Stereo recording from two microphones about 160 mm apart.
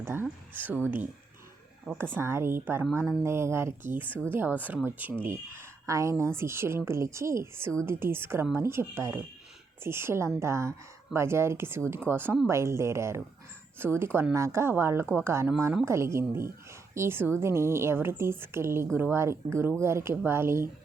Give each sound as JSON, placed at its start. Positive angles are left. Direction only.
{"t": 0.0, "sound": "a woman's voice", "side_deg": -15}
{"t": 2.1, "sound": "a woman's voice", "side_deg": -15}